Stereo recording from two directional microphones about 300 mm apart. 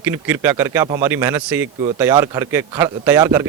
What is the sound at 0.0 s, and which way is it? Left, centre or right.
A man's voice, centre.